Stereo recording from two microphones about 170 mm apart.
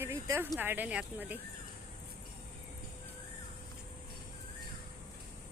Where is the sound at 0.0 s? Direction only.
15° right (ahead or behind).